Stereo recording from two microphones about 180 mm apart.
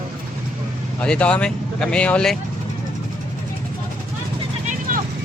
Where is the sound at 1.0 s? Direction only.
5° left (ahead or behind).